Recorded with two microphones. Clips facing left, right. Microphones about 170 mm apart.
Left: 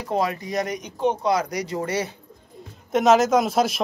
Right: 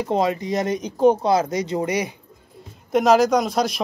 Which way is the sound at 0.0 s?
25° right (ahead or behind).